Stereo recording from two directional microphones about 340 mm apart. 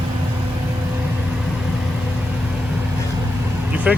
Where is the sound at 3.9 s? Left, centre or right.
Centre.